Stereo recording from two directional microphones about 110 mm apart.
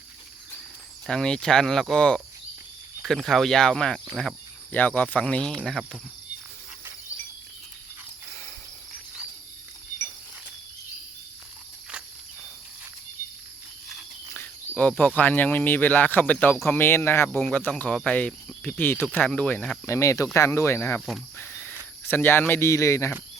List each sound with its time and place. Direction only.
1.0 s speech: 5° left (ahead or behind)
4.7 s speech: 15° left (ahead or behind)
14.8 s speech: 15° left (ahead or behind)
19.9 s speech: 30° left (ahead or behind)
21.3 s cricket: 20° left (ahead or behind)
22.0 s speech: 20° left (ahead or behind)